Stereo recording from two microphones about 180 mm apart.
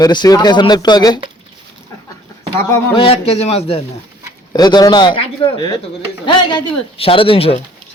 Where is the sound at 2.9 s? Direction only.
30° left (ahead or behind).